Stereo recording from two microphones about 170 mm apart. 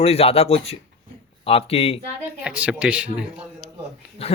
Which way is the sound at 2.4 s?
5° right (ahead or behind).